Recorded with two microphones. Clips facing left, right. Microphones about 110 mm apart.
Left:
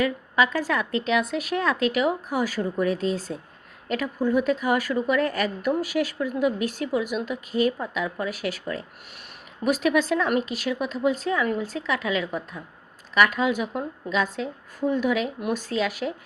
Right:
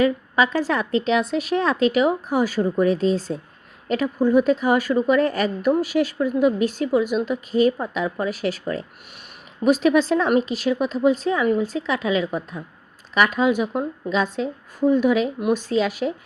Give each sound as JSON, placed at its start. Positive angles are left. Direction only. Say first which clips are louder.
{"t": 0.0, "sound": "a woman's voice", "louder": "right 4 dB", "side_deg": -25}